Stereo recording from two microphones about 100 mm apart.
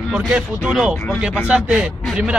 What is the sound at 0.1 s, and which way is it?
A man's voice, 5° right (ahead or behind).